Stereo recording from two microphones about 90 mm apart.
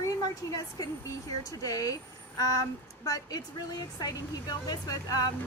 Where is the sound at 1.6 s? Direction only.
45° left (ahead or behind).